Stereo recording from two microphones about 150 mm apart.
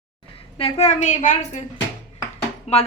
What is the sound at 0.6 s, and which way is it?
A woman's voice, 40° left (ahead or behind).